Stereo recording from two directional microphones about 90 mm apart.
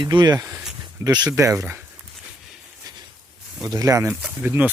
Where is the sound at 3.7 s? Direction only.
40° right (ahead or behind).